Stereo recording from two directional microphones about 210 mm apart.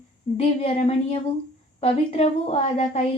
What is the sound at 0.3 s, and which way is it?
A woman's voice, 30° left (ahead or behind).